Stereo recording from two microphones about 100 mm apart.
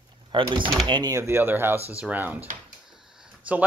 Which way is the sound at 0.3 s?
55° right (ahead or behind).